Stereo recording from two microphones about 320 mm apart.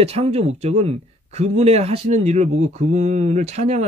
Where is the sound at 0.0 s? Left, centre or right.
Centre.